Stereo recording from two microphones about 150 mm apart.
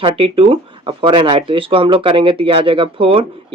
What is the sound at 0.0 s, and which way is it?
Speech, 35° right (ahead or behind).